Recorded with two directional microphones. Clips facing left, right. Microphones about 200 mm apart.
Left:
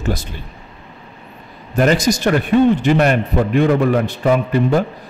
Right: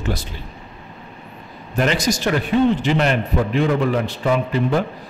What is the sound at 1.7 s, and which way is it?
A man's voice, 45° left (ahead or behind).